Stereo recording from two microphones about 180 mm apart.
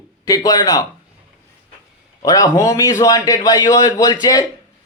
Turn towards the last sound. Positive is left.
turn(degrees=25)  # may be behind; listen again after turning